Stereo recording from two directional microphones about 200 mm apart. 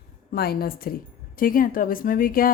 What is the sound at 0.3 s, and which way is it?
A woman's voice, 50° left (ahead or behind).